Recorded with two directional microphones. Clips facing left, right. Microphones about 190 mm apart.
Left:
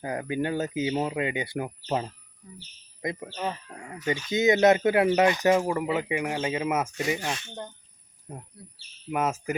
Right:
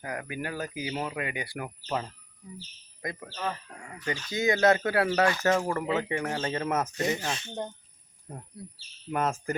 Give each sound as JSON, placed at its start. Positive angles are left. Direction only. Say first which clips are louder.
{"t": 0.0, "sound": "speech", "louder": "left 6 dB", "side_deg": 25}
{"t": 7.3, "sound": "speech", "louder": "right 3 dB", "side_deg": -25}
{"t": 8.3, "sound": "speech", "louder": "even", "side_deg": 5}